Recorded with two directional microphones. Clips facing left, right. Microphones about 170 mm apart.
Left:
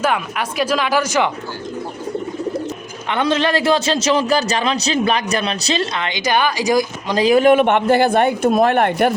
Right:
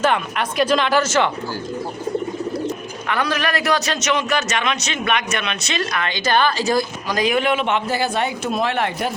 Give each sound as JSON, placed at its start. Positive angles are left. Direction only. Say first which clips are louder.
{"t": 0.0, "sound": "speech", "louder": "even", "side_deg": 5}
{"t": 3.1, "sound": "a man's voice", "louder": "left 5 dB", "side_deg": 25}
{"t": 7.1, "sound": "a man's voice", "louder": "left 7 dB", "side_deg": 30}
{"t": 7.5, "sound": "a man's voice", "louder": "left 7 dB", "side_deg": 55}